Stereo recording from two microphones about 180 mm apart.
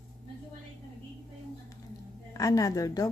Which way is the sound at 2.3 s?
20° left (ahead or behind).